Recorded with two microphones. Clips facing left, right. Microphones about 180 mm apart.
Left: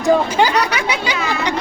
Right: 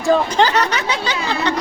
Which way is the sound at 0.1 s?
10° left (ahead or behind).